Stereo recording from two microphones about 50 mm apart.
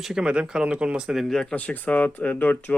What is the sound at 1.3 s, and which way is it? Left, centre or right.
Speech, centre.